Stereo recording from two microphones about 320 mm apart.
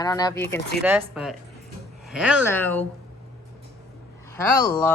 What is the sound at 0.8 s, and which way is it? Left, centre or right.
Speech, centre.